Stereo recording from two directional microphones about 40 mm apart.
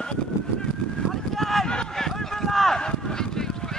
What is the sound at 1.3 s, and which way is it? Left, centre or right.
Run, centre.